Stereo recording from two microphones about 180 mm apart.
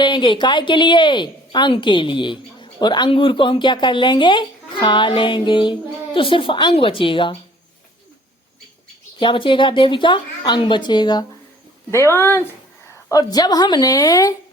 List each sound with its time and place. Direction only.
0.0 s a woman's voice: 25° left (ahead or behind)
9.1 s a woman's voice: 25° left (ahead or behind)